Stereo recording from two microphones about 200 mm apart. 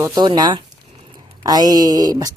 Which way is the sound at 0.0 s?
20° right (ahead or behind).